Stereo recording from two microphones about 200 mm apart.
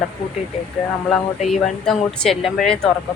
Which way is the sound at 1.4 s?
Centre (ahead or behind).